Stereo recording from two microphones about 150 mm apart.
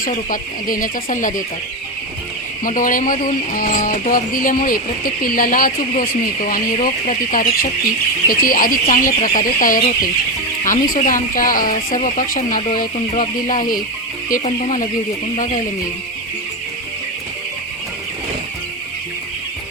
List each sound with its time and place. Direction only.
0.0 s speech: 65° left (ahead or behind)
2.6 s speech: 65° left (ahead or behind)